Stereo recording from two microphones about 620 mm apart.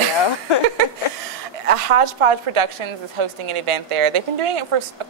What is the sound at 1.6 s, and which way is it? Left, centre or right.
A woman's voice, right.